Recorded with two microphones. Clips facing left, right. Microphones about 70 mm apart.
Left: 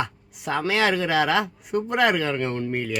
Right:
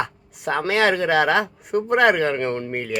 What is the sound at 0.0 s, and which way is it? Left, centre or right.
Speech, right.